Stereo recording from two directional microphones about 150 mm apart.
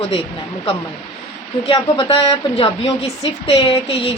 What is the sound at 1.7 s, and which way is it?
Speech, 35° left (ahead or behind).